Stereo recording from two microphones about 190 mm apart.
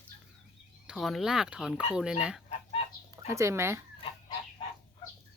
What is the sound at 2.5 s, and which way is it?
Goose, 35° left (ahead or behind).